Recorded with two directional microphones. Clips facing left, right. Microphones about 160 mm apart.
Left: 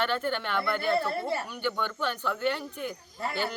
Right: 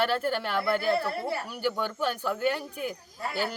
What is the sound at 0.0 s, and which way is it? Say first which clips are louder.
A woman's voice: right 2 dB; 10° right (ahead or behind).